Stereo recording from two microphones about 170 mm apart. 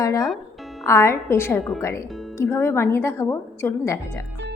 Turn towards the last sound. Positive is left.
turn(degrees=15)  # may be behind; listen again after turning